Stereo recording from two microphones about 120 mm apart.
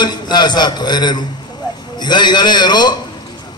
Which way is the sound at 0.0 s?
35° left (ahead or behind).